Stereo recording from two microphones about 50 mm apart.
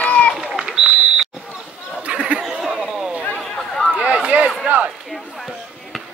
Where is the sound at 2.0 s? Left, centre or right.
Right.